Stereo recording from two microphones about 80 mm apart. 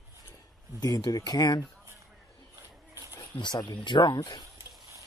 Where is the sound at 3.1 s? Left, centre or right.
Left.